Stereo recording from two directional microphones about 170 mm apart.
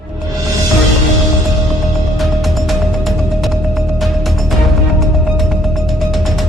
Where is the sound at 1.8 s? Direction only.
Centre (ahead or behind).